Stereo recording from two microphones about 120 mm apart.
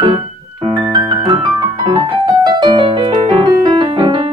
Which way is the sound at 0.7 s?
35° right (ahead or behind).